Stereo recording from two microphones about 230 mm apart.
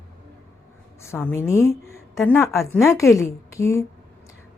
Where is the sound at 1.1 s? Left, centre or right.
Centre.